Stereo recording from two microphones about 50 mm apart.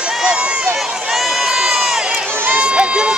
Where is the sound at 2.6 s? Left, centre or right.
Right.